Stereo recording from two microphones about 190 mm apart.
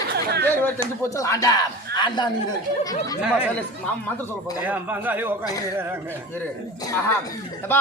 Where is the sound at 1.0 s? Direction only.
15° left (ahead or behind).